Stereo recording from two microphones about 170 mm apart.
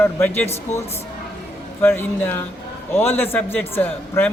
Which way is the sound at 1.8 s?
10° left (ahead or behind).